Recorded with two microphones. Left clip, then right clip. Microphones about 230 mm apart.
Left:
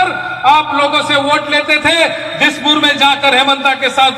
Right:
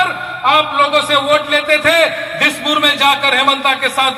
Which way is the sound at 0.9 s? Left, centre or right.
Centre.